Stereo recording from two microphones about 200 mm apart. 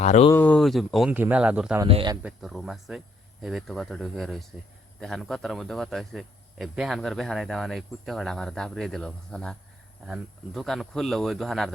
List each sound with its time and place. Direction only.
0.0 s speech: 35° left (ahead or behind)
0.3 s speech: 5° left (ahead or behind)
1.9 s speech: 25° right (ahead or behind)
2.2 s speech: centre (ahead or behind)